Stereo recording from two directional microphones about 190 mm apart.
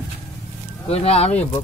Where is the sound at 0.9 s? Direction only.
30° left (ahead or behind).